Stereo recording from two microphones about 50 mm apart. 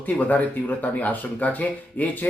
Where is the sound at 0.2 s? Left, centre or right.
Left.